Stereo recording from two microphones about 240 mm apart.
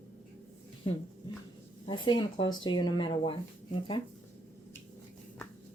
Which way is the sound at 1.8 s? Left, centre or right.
Left.